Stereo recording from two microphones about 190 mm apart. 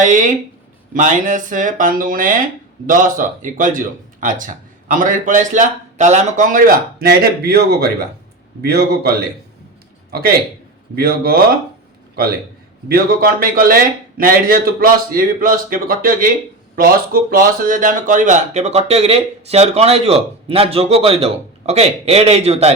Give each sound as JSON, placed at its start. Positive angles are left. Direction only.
{"t": 0.0, "sound": "a man's voice", "side_deg": -40}